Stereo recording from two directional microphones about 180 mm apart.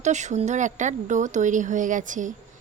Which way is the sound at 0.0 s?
40° right (ahead or behind).